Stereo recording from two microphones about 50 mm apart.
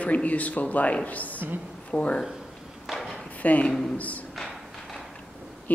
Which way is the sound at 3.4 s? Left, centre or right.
Left.